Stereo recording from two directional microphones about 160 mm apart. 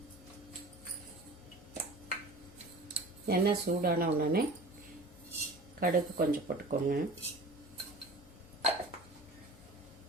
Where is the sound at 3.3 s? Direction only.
70° right (ahead or behind).